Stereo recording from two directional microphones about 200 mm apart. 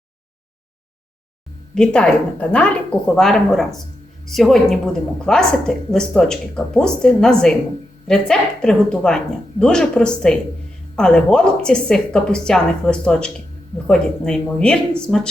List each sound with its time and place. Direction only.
1.7 s speech: 5° left (ahead or behind)